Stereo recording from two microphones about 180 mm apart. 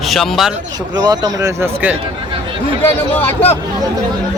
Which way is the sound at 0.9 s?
20° right (ahead or behind).